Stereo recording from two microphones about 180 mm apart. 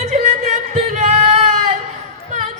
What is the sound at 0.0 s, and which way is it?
Singing, 40° right (ahead or behind).